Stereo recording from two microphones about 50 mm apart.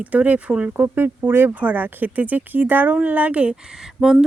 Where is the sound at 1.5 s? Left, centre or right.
Right.